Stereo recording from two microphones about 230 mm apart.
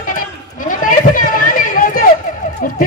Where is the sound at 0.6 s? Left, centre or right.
Left.